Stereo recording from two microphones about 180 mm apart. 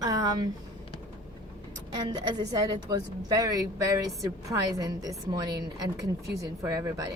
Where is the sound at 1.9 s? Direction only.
20° right (ahead or behind).